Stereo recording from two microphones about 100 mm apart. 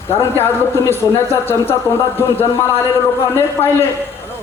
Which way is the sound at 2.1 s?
25° left (ahead or behind).